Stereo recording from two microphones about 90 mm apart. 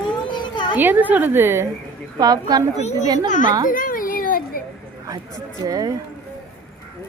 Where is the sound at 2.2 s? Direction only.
45° right (ahead or behind).